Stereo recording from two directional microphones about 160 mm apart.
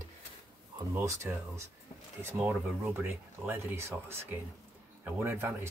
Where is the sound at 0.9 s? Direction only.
15° right (ahead or behind).